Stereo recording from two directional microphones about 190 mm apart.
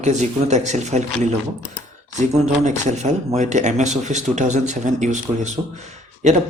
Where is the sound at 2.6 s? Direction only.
40° right (ahead or behind).